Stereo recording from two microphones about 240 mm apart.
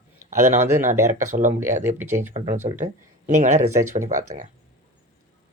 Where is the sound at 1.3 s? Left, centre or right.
Right.